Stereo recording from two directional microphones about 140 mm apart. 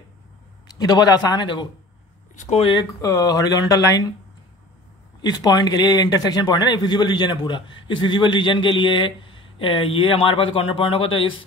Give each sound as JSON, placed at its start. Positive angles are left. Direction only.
{"t": 0.7, "sound": "speech", "side_deg": 30}
{"t": 5.2, "sound": "a man's voice", "side_deg": 30}